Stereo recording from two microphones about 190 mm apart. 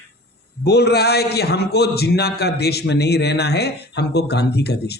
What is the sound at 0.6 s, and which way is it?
A man's voice, 60° left (ahead or behind).